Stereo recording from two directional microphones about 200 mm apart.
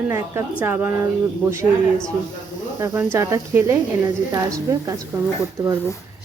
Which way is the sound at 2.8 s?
10° right (ahead or behind).